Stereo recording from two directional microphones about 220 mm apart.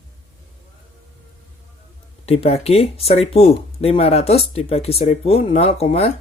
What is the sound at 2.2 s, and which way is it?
Speech, 25° left (ahead or behind).